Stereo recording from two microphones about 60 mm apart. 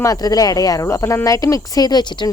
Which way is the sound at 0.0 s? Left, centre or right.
Left.